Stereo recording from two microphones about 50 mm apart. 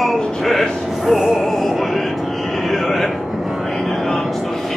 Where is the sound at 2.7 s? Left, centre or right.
Centre.